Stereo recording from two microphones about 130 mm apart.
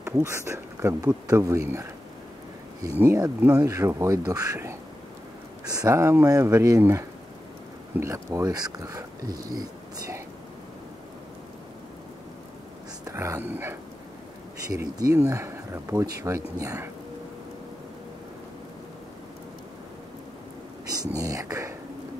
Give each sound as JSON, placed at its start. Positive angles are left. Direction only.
{"t": 0.0, "sound": "speech", "side_deg": -20}
{"t": 3.0, "sound": "speech", "side_deg": -25}
{"t": 13.0, "sound": "speech", "side_deg": -25}
{"t": 14.7, "sound": "speech", "side_deg": -25}
{"t": 20.9, "sound": "speech", "side_deg": -30}